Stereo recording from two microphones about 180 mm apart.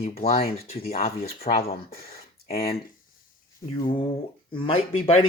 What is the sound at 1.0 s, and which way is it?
Speech, 35° left (ahead or behind).